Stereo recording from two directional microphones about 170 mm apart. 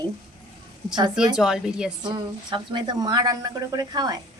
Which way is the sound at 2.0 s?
25° right (ahead or behind).